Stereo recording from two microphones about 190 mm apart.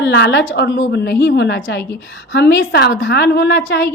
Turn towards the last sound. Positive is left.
turn(degrees=60)  # may be behind; listen again after turning